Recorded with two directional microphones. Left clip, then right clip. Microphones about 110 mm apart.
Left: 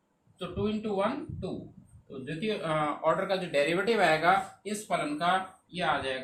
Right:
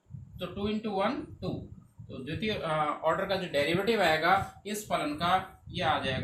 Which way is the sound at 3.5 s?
90° left.